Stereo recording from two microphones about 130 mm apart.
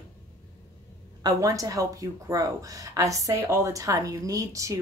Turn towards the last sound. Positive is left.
turn(degrees=-25)  # may be behind; listen again after turning